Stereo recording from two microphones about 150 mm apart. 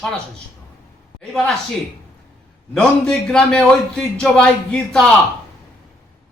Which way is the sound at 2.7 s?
5° left (ahead or behind).